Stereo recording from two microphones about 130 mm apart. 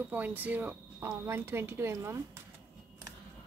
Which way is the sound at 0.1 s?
15° right (ahead or behind).